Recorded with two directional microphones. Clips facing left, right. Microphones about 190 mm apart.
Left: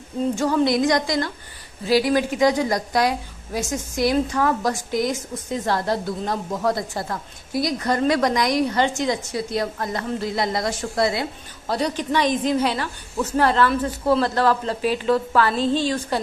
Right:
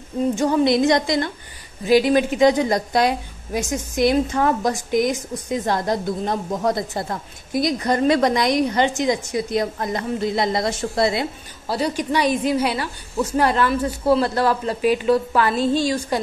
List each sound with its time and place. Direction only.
0.4 s a woman's voice: 20° right (ahead or behind)
11.6 s a woman's voice: 5° right (ahead or behind)